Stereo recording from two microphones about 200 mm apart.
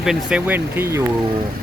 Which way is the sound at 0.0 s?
5° right (ahead or behind).